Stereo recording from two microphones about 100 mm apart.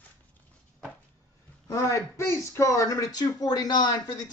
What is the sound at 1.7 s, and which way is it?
Speech, 30° left (ahead or behind).